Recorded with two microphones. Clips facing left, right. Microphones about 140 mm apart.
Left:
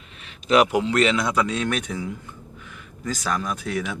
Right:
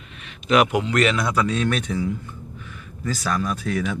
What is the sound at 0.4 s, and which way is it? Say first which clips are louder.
Speech: even; 30° left (ahead or behind).